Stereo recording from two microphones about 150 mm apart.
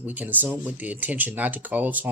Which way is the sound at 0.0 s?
10° right (ahead or behind).